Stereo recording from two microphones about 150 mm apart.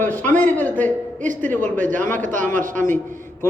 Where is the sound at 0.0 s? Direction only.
10° left (ahead or behind).